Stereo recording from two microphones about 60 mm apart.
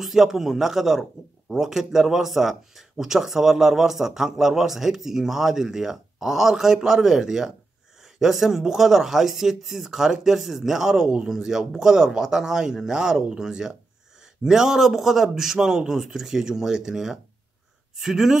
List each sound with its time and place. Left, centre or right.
0.0 s speech: centre
11.3 s speech: centre